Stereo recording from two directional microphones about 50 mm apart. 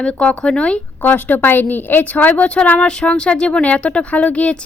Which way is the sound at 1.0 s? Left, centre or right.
Left.